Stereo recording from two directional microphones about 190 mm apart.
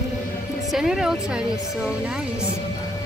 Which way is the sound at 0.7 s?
Centre (ahead or behind).